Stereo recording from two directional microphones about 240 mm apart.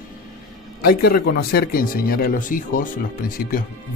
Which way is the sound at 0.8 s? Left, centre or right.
Left.